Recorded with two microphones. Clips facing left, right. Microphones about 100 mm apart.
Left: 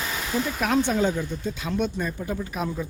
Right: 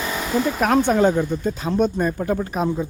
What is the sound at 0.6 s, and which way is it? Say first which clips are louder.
Speech: right 6 dB; 50° right (ahead or behind).